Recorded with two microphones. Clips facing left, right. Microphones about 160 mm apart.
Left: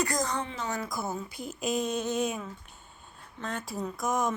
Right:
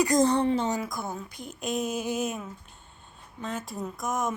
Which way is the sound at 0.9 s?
5° left (ahead or behind).